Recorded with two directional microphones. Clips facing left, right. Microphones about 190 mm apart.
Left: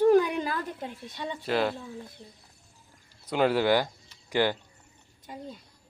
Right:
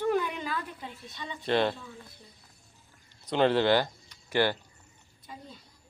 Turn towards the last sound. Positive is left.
turn(degrees=15)  # may be behind; listen again after turning